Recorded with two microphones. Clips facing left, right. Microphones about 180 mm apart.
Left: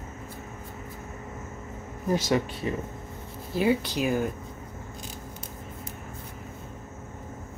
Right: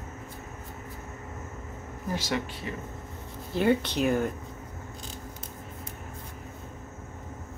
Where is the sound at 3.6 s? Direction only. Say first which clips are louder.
Even; 5° left (ahead or behind).